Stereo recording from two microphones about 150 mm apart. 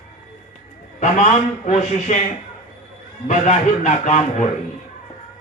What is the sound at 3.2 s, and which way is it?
Speech, 50° left (ahead or behind).